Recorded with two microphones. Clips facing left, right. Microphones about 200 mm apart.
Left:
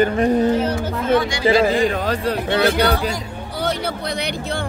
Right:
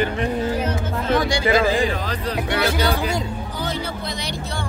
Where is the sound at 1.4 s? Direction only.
30° left (ahead or behind).